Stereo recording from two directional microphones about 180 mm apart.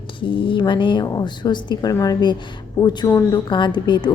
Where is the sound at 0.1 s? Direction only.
30° left (ahead or behind).